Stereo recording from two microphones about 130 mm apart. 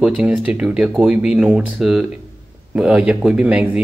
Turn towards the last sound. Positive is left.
turn(degrees=-10)  # may be behind; listen again after turning